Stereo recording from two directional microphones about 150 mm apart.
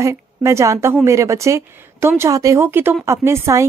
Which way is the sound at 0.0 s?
20° right (ahead or behind).